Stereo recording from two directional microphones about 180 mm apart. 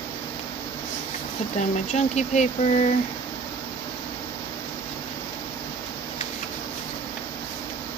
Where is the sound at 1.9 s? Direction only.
40° left (ahead or behind).